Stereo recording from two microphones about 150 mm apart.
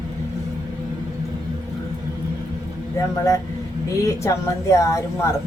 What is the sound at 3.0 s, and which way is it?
A woman's voice, 20° left (ahead or behind).